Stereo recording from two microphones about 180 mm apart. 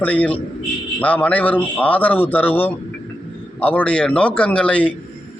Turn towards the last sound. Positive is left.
turn(degrees=5)  # may be behind; listen again after turning